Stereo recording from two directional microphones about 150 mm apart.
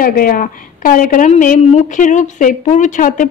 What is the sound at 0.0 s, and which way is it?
A woman's voice, 75° left (ahead or behind).